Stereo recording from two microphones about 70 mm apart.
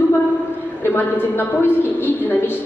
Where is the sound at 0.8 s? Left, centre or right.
Left.